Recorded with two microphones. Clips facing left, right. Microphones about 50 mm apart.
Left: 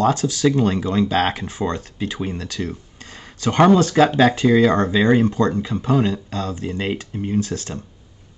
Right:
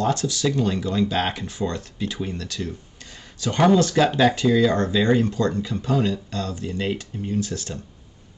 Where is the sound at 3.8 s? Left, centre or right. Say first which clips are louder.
Left 3 dB; left.